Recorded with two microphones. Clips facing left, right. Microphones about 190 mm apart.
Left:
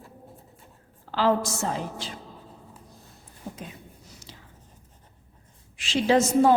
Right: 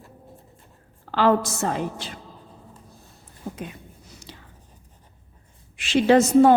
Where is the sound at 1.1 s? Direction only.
60° right (ahead or behind).